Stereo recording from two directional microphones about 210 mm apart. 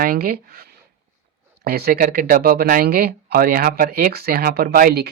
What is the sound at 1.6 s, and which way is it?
Speech, 50° right (ahead or behind).